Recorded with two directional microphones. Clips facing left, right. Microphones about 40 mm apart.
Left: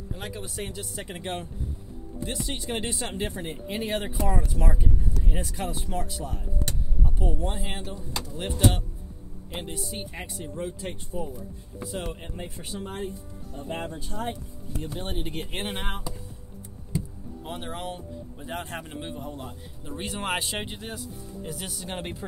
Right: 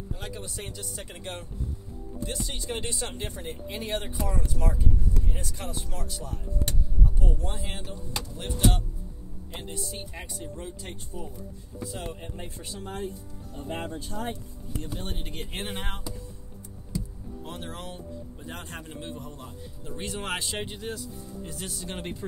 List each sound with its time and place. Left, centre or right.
0.1 s speech: centre; by 8.3 s left
9.5 s speech: left
14.8 s speech: left
17.5 s speech: left